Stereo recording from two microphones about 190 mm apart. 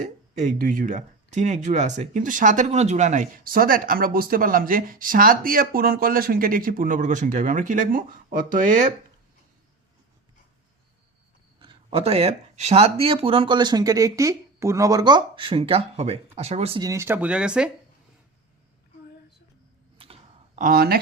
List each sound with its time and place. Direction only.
0.0 s speech: 40° right (ahead or behind)
11.6 s speech: 25° right (ahead or behind)
16.8 s speech: 15° right (ahead or behind)
20.0 s clicking: 30° right (ahead or behind)
20.6 s speech: 50° right (ahead or behind)